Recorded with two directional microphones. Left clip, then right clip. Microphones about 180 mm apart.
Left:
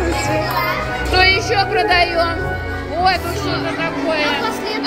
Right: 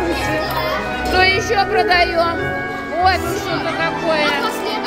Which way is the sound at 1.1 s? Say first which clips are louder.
Left 1 dB; 5° right (ahead or behind).